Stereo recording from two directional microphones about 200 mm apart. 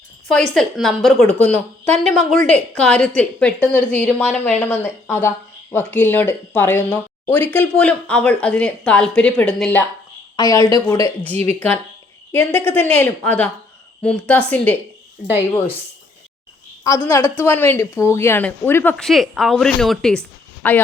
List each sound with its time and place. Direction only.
0.3 s a woman's voice: centre (ahead or behind)
10.3 s a woman's voice: 20° left (ahead or behind)
16.8 s a woman's voice: 15° left (ahead or behind)